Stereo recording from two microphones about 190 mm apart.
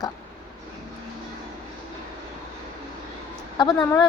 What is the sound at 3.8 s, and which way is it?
Speech, 20° left (ahead or behind).